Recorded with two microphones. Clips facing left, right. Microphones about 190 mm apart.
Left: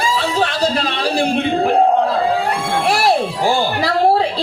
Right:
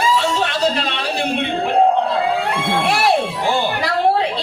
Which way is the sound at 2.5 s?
35° left (ahead or behind).